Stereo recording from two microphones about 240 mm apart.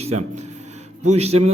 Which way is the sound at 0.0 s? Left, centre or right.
Right.